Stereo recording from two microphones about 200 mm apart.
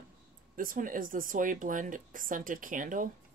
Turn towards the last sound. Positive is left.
turn(degrees=-40)  # may be behind; listen again after turning